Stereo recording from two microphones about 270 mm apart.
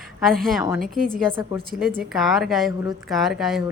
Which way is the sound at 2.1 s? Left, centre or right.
Centre.